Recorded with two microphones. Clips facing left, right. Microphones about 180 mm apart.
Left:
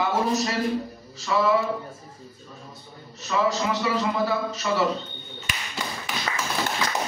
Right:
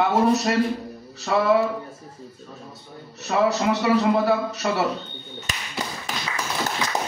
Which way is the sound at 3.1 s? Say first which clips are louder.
Right 3 dB; 65° right (ahead or behind).